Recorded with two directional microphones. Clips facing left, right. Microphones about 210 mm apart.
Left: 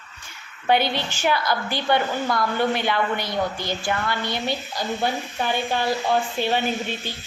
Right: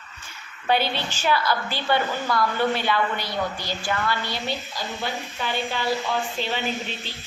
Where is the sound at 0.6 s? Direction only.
15° left (ahead or behind).